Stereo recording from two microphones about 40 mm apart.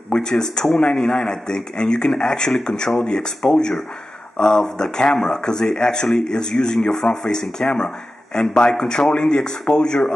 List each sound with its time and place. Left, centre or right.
0.1 s speech: centre